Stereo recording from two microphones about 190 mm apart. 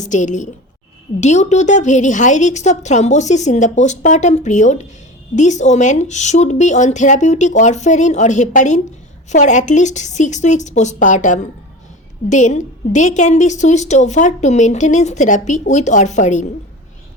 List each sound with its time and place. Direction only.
0.0 s a woman's voice: 40° left (ahead or behind)